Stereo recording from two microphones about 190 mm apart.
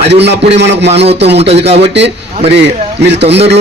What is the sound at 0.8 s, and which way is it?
Speech, 35° right (ahead or behind).